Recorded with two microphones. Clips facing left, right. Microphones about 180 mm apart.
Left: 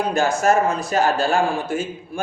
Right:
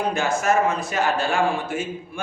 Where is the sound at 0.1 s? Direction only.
35° left (ahead or behind).